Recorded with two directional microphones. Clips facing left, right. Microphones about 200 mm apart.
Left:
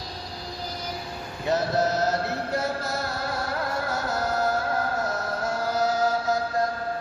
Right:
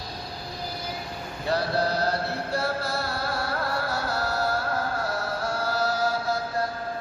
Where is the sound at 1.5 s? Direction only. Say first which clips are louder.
Left 2 dB; 20° left (ahead or behind).